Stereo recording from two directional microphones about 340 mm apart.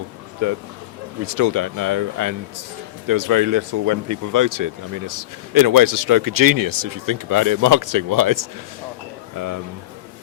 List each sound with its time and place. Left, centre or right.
0.4 s speech: right